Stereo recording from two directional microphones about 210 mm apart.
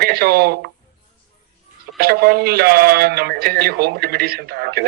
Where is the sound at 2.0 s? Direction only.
45° right (ahead or behind).